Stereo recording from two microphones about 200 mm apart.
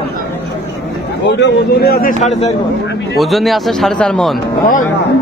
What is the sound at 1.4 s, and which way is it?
Speech, 60° left (ahead or behind).